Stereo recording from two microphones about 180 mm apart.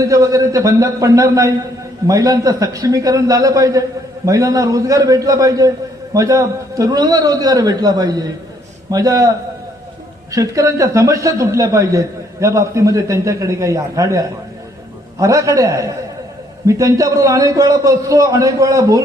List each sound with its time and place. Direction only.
0.0 s a man's voice: 20° right (ahead or behind)
10.3 s a man's voice: 20° right (ahead or behind)